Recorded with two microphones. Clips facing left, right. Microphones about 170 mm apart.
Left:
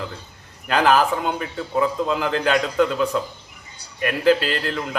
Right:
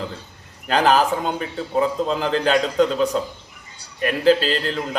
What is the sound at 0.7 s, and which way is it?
A man's voice, 35° right (ahead or behind).